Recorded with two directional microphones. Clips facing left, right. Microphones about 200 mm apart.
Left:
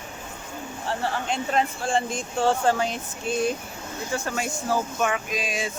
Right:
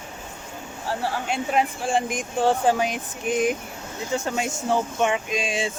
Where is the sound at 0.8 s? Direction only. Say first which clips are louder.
Right 1 dB; 5° right (ahead or behind).